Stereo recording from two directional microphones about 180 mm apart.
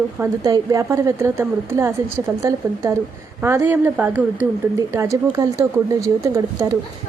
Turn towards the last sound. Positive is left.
turn(degrees=-15)  # may be behind; listen again after turning